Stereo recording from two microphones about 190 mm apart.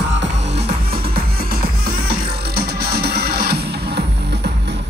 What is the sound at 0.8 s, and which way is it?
Music, 50° right (ahead or behind).